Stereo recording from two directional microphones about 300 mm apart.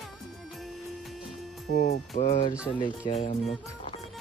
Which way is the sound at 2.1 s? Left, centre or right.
Left.